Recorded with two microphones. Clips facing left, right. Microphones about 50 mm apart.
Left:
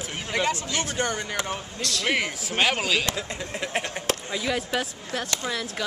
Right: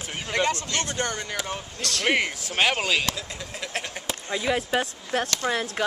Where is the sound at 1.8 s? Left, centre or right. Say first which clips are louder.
Right 1 dB; right.